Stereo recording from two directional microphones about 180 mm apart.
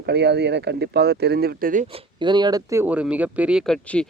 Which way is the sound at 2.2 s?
25° right (ahead or behind).